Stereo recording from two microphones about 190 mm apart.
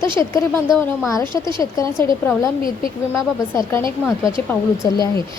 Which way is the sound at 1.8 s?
15° left (ahead or behind).